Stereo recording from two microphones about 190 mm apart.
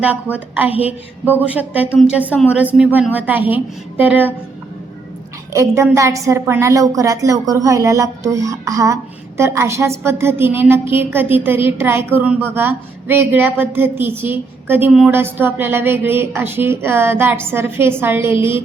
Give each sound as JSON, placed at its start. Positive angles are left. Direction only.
{"t": 0.0, "sound": "a woman's voice", "side_deg": -10}
{"t": 5.5, "sound": "a woman's voice", "side_deg": -15}